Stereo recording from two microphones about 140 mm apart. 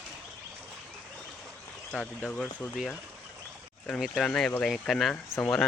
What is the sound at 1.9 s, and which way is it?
Speech, 5° left (ahead or behind).